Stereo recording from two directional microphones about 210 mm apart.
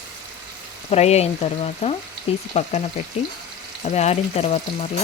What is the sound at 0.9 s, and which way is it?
Frying, 30° left (ahead or behind).